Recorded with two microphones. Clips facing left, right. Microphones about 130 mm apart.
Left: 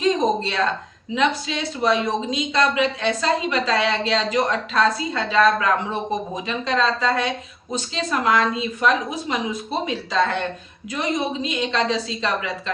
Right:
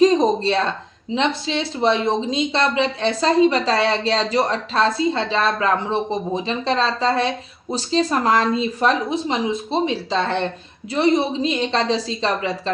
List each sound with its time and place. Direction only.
0.0 s speech: 35° right (ahead or behind)